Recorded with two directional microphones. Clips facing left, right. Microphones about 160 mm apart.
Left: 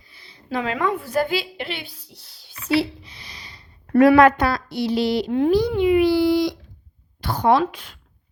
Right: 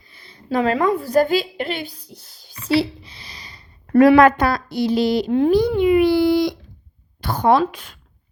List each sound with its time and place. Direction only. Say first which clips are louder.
0.1 s a woman's voice: right 5 dB; 50° right (ahead or behind)
2.6 s a sound: right 2 dB; 30° right (ahead or behind)
4.2 s a woman's voice: right 1 dB; 45° right (ahead or behind)
5.5 s a child's voice: right 1 dB; 50° right (ahead or behind)